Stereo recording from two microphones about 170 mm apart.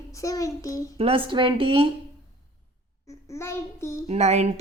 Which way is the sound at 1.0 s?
30° right (ahead or behind).